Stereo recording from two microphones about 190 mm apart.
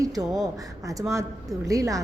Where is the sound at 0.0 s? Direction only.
20° right (ahead or behind).